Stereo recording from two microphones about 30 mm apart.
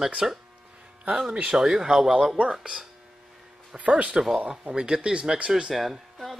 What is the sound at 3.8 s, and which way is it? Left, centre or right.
Speech, right.